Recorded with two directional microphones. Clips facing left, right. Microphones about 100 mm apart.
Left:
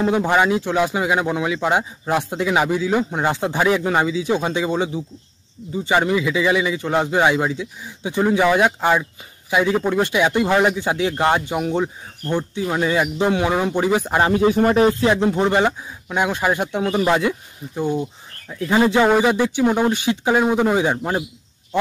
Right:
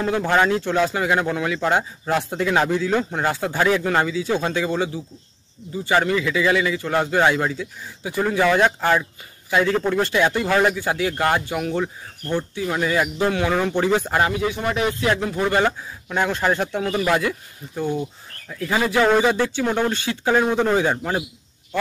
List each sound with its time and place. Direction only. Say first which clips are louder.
0.0 s speech: left 2 dB; 20° left (ahead or behind)
14.2 s speech: left 6 dB; 35° left (ahead or behind); by 21.2 s 15° left (ahead or behind)